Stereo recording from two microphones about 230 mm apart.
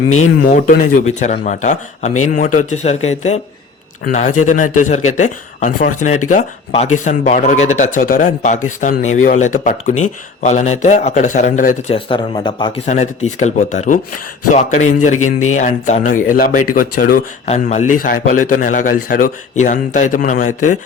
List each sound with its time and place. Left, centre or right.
0.4 s a man's voice: left
12.9 s a man's voice: left
15.1 s speech: left
15.5 s a man's voice: left